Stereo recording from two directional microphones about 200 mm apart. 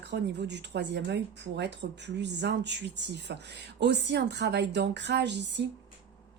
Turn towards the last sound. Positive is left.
turn(degrees=-60)  # may be behind; listen again after turning